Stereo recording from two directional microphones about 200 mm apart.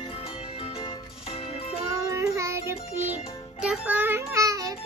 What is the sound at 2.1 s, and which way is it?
Music, 15° right (ahead or behind).